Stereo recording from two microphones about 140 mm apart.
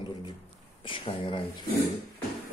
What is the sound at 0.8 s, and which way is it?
Speech, 40° left (ahead or behind).